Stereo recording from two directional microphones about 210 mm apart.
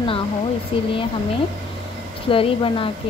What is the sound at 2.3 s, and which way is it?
Speech, 25° left (ahead or behind).